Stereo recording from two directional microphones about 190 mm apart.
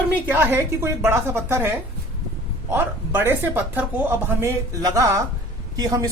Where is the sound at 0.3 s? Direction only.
10° right (ahead or behind).